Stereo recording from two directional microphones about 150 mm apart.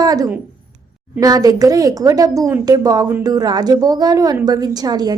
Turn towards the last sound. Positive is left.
turn(degrees=-25)  # may be behind; listen again after turning